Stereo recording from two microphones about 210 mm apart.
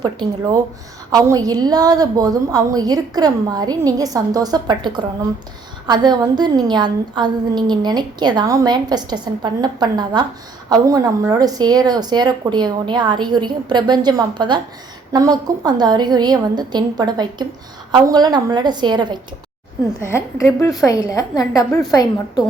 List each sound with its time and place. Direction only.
0.0 s a woman's voice: 20° right (ahead or behind)
20.1 s a woman's voice: 15° left (ahead or behind)